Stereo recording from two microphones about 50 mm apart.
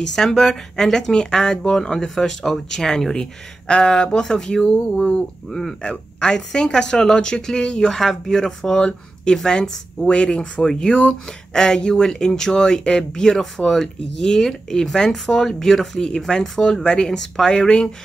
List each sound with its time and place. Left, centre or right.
0.1 s speech: centre
10.7 s speech: centre